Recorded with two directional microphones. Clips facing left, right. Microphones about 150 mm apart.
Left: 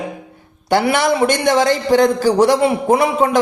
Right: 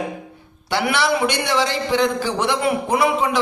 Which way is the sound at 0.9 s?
45° left (ahead or behind).